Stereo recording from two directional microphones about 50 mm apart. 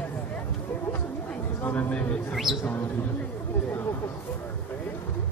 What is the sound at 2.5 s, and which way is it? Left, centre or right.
Bird, centre.